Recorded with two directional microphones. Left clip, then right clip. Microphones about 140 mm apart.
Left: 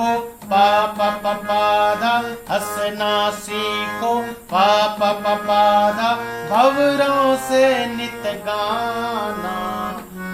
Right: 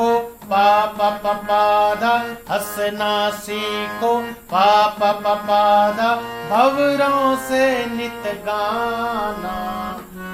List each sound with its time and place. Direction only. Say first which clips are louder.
0.5 s mantra: even; 30° right (ahead or behind)
6.5 s music: left 1 dB; 30° right (ahead or behind)